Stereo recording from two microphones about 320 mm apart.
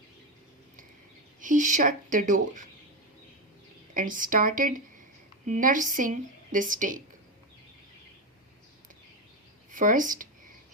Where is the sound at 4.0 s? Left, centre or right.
Right.